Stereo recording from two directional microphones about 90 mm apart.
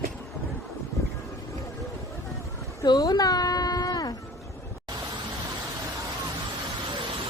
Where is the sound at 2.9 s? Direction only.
45° left (ahead or behind).